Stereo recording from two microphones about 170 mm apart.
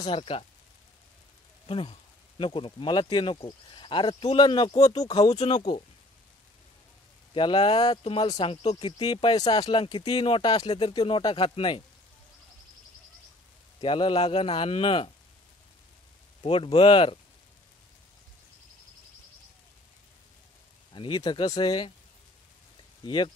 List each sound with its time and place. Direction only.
0.0 s a man's voice: 35° left (ahead or behind)
1.7 s speech: 35° left (ahead or behind)
5.4 s a man's voice: 40° left (ahead or behind)
7.3 s a man's voice: 30° left (ahead or behind)
13.7 s a man's voice: 30° left (ahead or behind)
16.4 s a man's voice: 30° left (ahead or behind)
20.9 s speech: 30° left (ahead or behind)
23.0 s speech: 30° left (ahead or behind)